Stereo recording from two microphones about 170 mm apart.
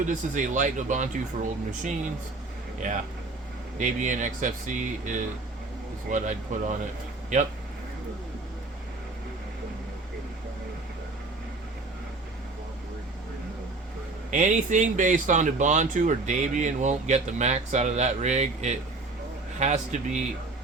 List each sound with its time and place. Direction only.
0.0 s speech: 50° right (ahead or behind)
3.8 s speech: 50° right (ahead or behind)
14.3 s speech: 45° right (ahead or behind)